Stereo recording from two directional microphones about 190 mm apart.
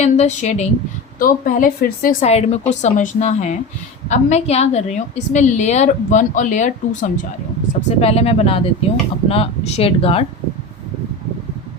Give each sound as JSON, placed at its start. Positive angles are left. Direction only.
{"t": 0.0, "sound": "a woman's voice", "side_deg": 35}
{"t": 1.2, "sound": "a woman's voice", "side_deg": 50}
{"t": 2.2, "sound": "a woman's voice", "side_deg": 35}